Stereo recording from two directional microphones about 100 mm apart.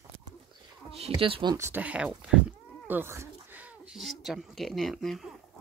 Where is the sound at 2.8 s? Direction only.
20° right (ahead or behind).